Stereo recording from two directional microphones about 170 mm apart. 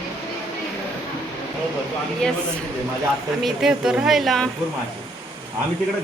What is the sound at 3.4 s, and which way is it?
Speech, 5° right (ahead or behind).